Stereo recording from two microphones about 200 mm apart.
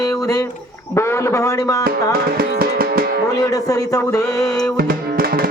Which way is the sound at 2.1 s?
50° right (ahead or behind).